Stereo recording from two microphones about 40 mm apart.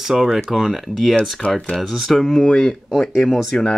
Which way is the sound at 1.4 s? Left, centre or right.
Left.